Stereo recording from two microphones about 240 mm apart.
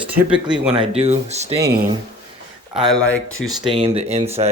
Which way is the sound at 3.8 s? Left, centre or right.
Right.